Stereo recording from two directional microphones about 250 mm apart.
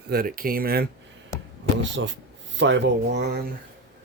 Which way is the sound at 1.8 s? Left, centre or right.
Right.